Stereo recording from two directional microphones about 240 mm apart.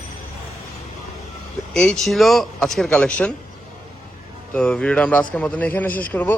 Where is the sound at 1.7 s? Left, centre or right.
Centre.